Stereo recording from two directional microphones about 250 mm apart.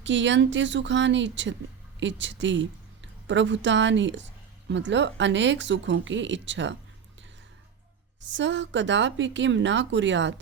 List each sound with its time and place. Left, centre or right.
0.0 s a woman's voice: right
8.3 s speech: right